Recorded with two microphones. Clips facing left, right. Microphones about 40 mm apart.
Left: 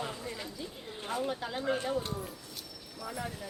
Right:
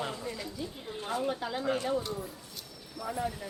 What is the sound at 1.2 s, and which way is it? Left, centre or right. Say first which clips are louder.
Speech: right 1 dB; centre.